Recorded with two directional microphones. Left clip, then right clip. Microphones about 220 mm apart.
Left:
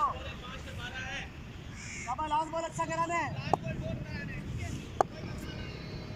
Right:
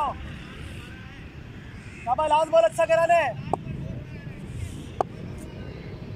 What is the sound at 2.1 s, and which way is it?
A man's voice, 50° right (ahead or behind).